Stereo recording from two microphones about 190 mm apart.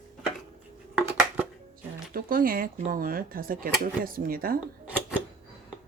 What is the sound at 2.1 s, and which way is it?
Speech, 50° right (ahead or behind).